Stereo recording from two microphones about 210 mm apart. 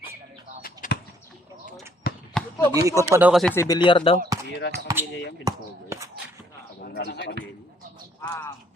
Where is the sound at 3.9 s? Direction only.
25° left (ahead or behind).